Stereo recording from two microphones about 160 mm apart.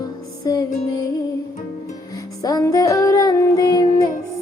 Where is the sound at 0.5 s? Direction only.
20° left (ahead or behind).